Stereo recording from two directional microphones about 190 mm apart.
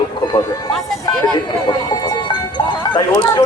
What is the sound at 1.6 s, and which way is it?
A man's voice, 20° left (ahead or behind).